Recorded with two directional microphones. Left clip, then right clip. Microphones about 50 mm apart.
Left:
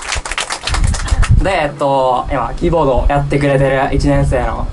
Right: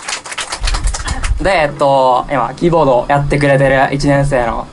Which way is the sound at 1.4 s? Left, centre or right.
Right.